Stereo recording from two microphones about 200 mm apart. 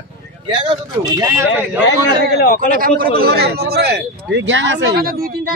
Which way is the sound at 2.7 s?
45° right (ahead or behind).